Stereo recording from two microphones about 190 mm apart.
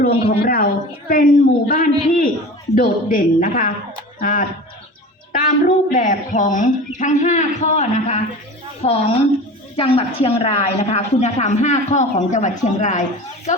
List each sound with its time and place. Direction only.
0.0 s a woman's voice: 55° left (ahead or behind)